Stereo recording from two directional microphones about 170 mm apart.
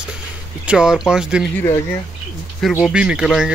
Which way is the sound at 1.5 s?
15° left (ahead or behind).